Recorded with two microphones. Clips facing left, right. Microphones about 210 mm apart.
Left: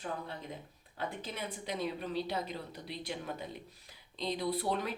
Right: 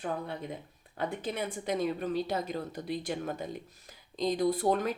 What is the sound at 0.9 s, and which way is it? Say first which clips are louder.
Speech: right 6 dB; 55° right (ahead or behind).